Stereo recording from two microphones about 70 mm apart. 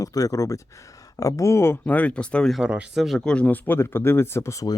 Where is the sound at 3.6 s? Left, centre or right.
Left.